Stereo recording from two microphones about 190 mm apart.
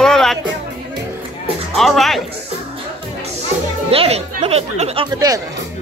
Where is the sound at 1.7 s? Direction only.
Centre (ahead or behind).